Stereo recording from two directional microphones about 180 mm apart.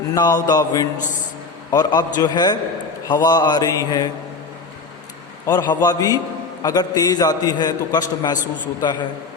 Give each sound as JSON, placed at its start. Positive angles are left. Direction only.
{"t": 0.1, "sound": "a man's voice", "side_deg": 20}
{"t": 5.5, "sound": "a man's voice", "side_deg": 20}